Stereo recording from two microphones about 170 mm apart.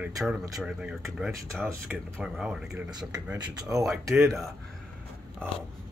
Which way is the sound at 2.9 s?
25° right (ahead or behind).